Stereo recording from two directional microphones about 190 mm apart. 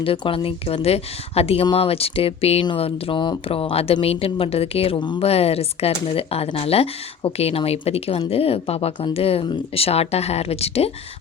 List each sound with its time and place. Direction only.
0.0 s speech: 30° left (ahead or behind)